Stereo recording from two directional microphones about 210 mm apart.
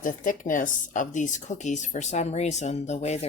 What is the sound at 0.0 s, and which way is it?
Speech, 40° left (ahead or behind).